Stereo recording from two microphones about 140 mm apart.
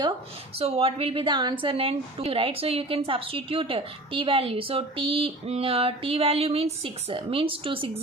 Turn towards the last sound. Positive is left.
turn(degrees=-40)  # may be behind; listen again after turning